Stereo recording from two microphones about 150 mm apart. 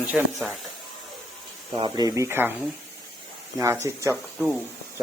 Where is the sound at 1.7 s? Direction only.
35° right (ahead or behind).